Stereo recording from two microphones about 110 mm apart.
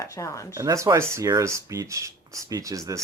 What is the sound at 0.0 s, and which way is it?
Speech, 30° left (ahead or behind).